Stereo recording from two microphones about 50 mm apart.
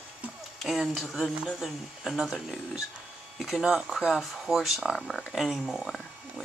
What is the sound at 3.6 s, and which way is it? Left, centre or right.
Speech, centre.